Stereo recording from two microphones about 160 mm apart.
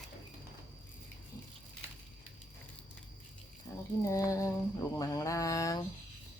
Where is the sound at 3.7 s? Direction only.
20° left (ahead or behind).